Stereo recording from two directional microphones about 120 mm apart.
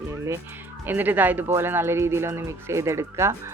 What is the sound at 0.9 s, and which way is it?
Speech, 15° right (ahead or behind).